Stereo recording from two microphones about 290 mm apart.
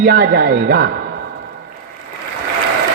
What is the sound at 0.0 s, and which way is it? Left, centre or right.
Speech, right.